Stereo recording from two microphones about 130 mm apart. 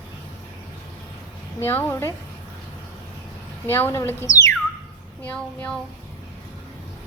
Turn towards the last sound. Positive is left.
turn(degrees=10)  # may be behind; listen again after turning